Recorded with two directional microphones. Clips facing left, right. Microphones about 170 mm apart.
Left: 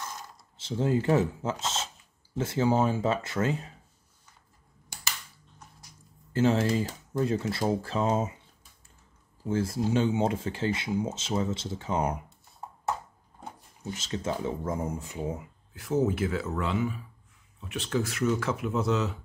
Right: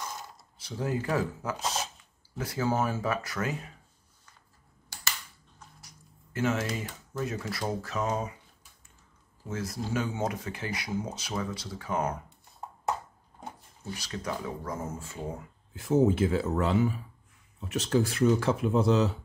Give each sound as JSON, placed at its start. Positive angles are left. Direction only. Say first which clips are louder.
{"t": 0.6, "sound": "speech", "louder": "left 5 dB", "side_deg": 25}
{"t": 6.3, "sound": "speech", "louder": "left 5 dB", "side_deg": 30}
{"t": 9.5, "sound": "speech", "louder": "left 6 dB", "side_deg": 30}
{"t": 13.8, "sound": "speech", "louder": "left 3 dB", "side_deg": 20}
{"t": 15.7, "sound": "speech", "louder": "right 3 dB", "side_deg": -25}